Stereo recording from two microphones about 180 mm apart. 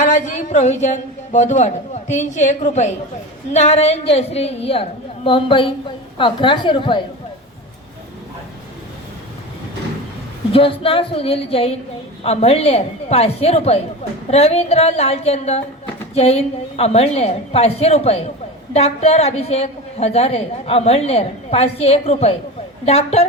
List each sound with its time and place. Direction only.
0.0 s a woman's voice: 45° left (ahead or behind); by 7.0 s 25° left (ahead or behind)
10.5 s a woman's voice: 30° left (ahead or behind)